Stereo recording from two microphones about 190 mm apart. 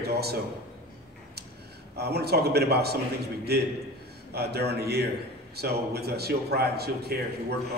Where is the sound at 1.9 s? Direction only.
60° right (ahead or behind).